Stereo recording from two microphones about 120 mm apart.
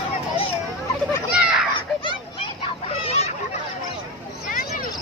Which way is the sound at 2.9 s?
60° left (ahead or behind).